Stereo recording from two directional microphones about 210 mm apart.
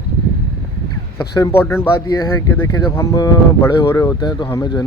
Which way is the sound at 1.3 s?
15° left (ahead or behind).